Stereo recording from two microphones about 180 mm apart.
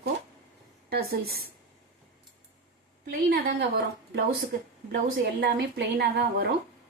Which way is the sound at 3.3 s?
60° right (ahead or behind).